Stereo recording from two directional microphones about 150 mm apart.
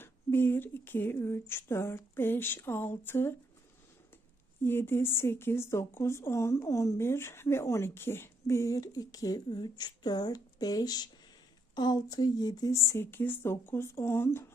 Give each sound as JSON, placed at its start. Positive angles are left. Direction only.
{"t": 0.0, "sound": "a woman's voice", "side_deg": 15}
{"t": 4.6, "sound": "a woman's voice", "side_deg": 15}